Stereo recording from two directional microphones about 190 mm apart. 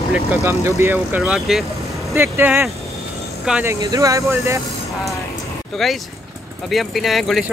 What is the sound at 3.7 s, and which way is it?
Speech, 15° right (ahead or behind).